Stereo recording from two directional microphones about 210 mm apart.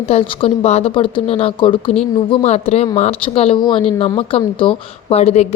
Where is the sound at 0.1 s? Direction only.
30° left (ahead or behind).